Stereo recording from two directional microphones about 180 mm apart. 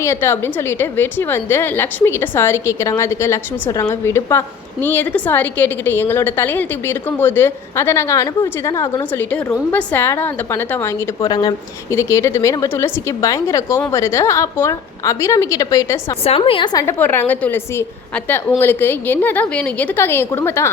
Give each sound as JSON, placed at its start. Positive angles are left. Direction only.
{"t": 0.0, "sound": "a woman's voice", "side_deg": 15}
{"t": 9.3, "sound": "a woman's voice", "side_deg": 10}
{"t": 16.2, "sound": "a woman's voice", "side_deg": 30}
{"t": 17.0, "sound": "a woman's voice", "side_deg": 10}